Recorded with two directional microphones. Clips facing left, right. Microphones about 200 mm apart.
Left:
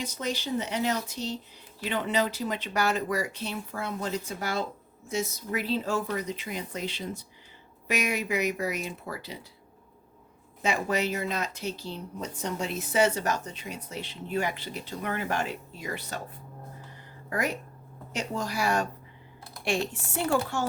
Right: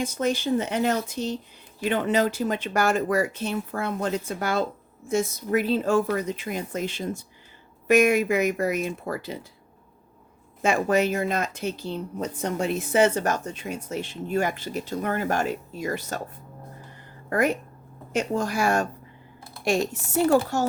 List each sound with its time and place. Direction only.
0.0 s a woman's voice: 50° right (ahead or behind)
10.6 s a woman's voice: 50° right (ahead or behind)
17.2 s a woman's voice: 55° right (ahead or behind)